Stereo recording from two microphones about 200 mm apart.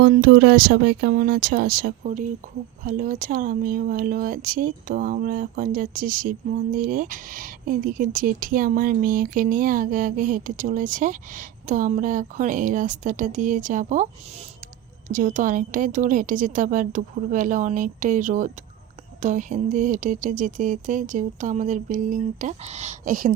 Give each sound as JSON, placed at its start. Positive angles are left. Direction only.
{"t": 0.0, "sound": "speech", "side_deg": -50}
{"t": 15.1, "sound": "speech", "side_deg": -40}